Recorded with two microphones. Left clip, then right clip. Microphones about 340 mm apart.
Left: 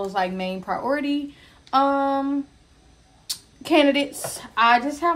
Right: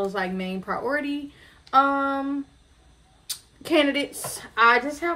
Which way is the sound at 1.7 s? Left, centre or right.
Left.